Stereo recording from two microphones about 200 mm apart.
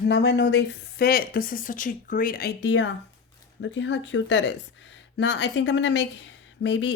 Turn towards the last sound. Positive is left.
turn(degrees=70)  # may be behind; listen again after turning